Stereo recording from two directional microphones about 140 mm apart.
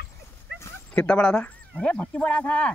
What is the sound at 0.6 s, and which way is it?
Dog, 10° left (ahead or behind).